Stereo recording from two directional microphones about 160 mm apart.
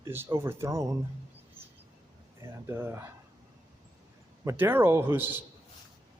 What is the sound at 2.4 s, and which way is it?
Speech, 15° right (ahead or behind).